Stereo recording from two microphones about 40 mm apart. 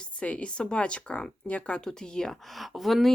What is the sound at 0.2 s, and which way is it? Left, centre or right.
Speech, left.